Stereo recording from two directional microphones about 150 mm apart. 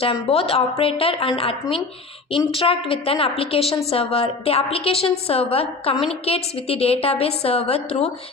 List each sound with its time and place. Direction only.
0.0 s a woman's voice: 40° left (ahead or behind)